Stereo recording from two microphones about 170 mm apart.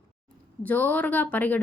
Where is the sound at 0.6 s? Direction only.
10° left (ahead or behind).